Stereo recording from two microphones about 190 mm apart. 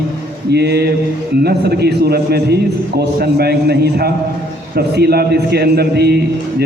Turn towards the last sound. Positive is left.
turn(degrees=-60)  # may be behind; listen again after turning